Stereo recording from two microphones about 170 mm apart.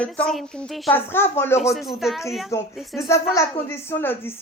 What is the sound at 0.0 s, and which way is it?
A woman's voice, 5° left (ahead or behind).